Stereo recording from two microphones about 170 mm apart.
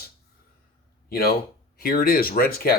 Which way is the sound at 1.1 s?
65° left (ahead or behind).